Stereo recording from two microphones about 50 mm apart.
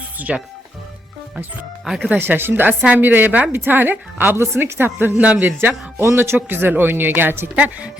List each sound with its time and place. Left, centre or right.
0.2 s a man's voice: right
2.1 s a woman's voice: right
4.4 s speech: right
5.1 s a man's voice: right
5.5 s speech: right
7.5 s a man's voice: right